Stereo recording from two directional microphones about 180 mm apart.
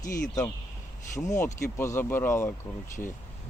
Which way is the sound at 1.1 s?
15° left (ahead or behind).